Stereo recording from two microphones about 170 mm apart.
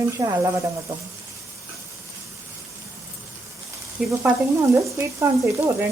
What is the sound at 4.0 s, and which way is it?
Sizzle, 5° right (ahead or behind).